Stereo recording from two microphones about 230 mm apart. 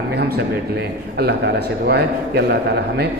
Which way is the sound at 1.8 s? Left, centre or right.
Right.